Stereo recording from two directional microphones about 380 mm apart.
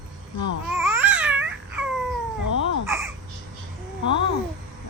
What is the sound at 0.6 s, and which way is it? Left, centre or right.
Babbling, centre.